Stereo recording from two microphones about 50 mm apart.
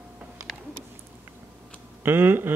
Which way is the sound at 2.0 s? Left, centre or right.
Right.